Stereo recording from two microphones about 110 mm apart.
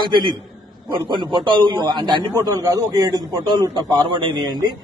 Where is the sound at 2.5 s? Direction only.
30° right (ahead or behind).